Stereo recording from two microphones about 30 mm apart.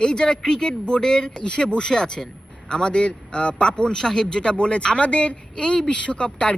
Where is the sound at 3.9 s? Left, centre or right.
Centre.